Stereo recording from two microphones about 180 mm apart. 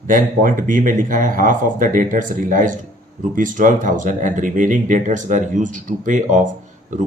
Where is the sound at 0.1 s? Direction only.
45° right (ahead or behind).